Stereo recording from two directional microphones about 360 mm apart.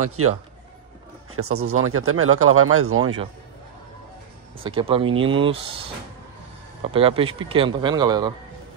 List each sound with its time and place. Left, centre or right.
0.0 s speech: right
4.6 s speech: centre
6.8 s speech: centre